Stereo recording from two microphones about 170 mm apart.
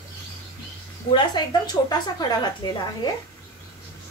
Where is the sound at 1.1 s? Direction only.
25° left (ahead or behind).